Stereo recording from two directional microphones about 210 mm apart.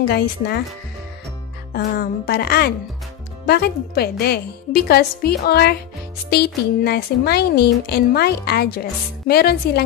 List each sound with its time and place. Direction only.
0.1 s speech: 50° left (ahead or behind)
1.7 s speech: 45° left (ahead or behind)